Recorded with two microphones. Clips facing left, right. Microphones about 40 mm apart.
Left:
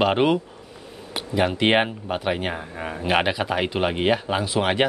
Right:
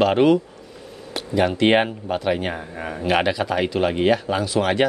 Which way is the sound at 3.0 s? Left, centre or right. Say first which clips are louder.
Right 2 dB; centre.